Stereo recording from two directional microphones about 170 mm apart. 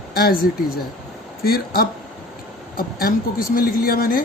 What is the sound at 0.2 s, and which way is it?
Speech, 60° left (ahead or behind).